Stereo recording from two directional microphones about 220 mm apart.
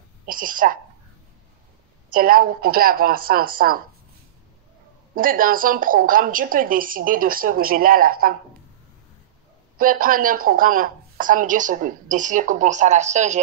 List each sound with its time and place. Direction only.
0.3 s a sound: 40° right (ahead or behind)
2.1 s speech: 40° right (ahead or behind)
5.1 s speech: 40° right (ahead or behind)
9.8 s speech: 40° right (ahead or behind)